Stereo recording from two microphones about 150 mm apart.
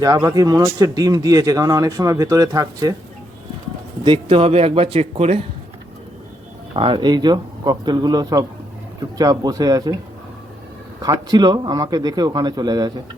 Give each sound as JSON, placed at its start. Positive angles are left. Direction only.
{"t": 0.0, "sound": "speech", "side_deg": -25}
{"t": 4.0, "sound": "a man's voice", "side_deg": -35}
{"t": 6.7, "sound": "speech", "side_deg": -35}
{"t": 11.0, "sound": "speech", "side_deg": -25}